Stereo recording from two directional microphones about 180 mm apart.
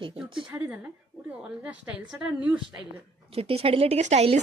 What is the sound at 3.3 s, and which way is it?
A woman's voice, 35° right (ahead or behind).